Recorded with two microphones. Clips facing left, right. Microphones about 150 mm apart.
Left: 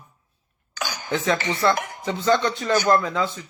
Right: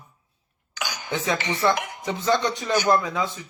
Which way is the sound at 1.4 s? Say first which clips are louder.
Left 1 dB; 15° right (ahead or behind).